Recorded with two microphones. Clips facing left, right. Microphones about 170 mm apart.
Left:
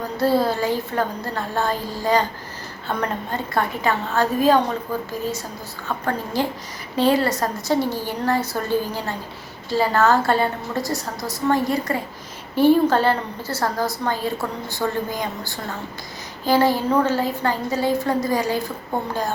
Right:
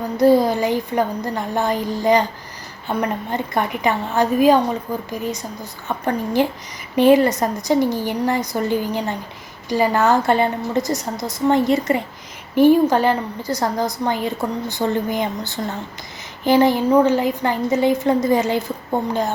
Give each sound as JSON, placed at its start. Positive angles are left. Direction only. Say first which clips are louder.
{"t": 0.2, "sound": "a woman's voice", "louder": "right 5 dB", "side_deg": -15}